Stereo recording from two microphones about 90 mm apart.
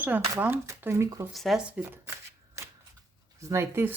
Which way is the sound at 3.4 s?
35° right (ahead or behind).